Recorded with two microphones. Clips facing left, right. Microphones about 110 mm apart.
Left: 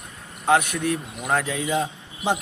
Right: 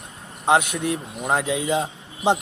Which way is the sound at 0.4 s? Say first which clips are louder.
Right 1 dB; 20° right (ahead or behind).